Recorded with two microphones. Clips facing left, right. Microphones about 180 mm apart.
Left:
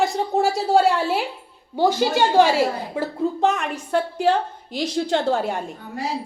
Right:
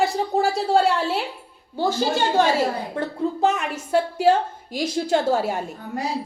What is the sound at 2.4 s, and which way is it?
Speech, 10° left (ahead or behind).